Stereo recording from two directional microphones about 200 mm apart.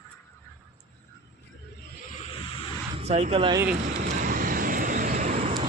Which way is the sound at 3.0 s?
30° right (ahead or behind).